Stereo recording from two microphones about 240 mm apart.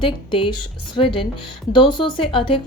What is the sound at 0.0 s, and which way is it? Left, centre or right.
Speech, left.